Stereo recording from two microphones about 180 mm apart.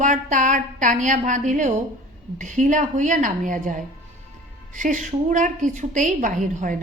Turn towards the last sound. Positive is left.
turn(degrees=-45)  # may be behind; listen again after turning